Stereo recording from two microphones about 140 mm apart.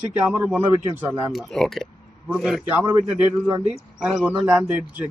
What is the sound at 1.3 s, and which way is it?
Speech, centre (ahead or behind).